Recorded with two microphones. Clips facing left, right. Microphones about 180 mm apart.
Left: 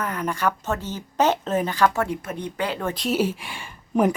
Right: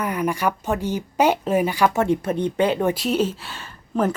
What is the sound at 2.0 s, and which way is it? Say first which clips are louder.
Speech: right 8 dB; 30° right (ahead or behind).